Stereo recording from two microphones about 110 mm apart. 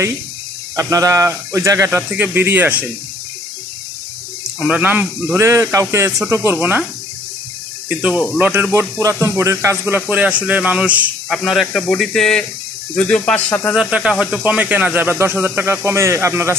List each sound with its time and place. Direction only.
0.7 s speech: 30° right (ahead or behind)
4.6 s speech: 15° right (ahead or behind)
5.3 s speech: 25° right (ahead or behind)
7.9 s speech: 10° right (ahead or behind)
11.2 s speech: centre (ahead or behind)
13.7 s speech: 10° right (ahead or behind); by 16.5 s 25° right (ahead or behind)